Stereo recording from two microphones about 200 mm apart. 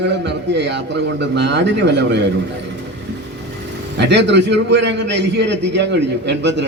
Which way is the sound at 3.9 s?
60° right (ahead or behind).